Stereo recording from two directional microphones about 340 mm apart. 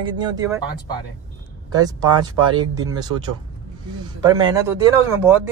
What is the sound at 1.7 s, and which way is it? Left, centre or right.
Speech, centre.